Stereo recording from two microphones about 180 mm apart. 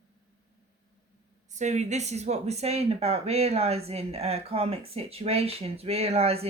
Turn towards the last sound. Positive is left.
turn(degrees=-35)  # may be behind; listen again after turning